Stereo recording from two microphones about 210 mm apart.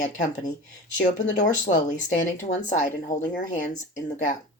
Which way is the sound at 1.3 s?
35° left (ahead or behind).